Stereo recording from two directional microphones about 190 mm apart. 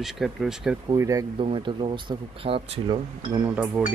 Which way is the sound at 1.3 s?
30° right (ahead or behind).